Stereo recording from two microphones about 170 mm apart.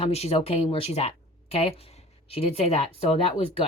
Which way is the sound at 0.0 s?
35° left (ahead or behind).